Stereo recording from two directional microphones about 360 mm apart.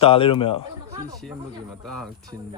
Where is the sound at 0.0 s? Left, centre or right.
Centre.